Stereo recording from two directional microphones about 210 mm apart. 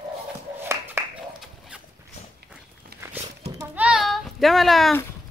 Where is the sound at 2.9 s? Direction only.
50° right (ahead or behind).